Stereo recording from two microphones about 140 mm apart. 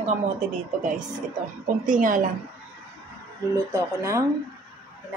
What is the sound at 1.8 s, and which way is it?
Speech, 65° right (ahead or behind).